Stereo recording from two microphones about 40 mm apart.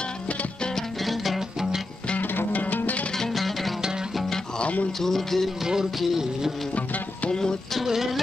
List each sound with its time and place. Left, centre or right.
1.0 s music: centre
2.3 s music: left
3.2 s music: centre
5.0 s music: centre
5.9 s music: centre
7.2 s music: centre
7.8 s music: centre